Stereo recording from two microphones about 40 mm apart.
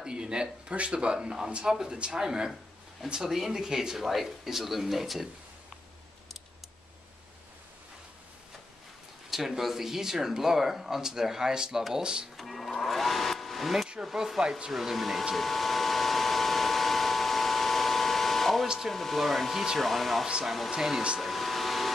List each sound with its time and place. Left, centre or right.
0.0 s a sound: right
0.7 s speech: right
1.1 s speech: centre
9.3 s speech: centre
12.4 s a sound: centre
14.0 s speech: centre
15.3 s vehicle: centre
18.9 s speech: centre
21.2 s vehicle: centre